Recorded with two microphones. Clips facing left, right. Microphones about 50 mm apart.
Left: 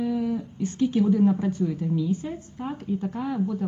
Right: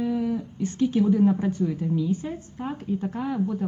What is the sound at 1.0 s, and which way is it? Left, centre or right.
A woman's voice, centre.